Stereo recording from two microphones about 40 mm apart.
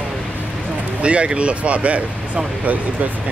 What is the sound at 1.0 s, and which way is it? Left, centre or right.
Speech, right.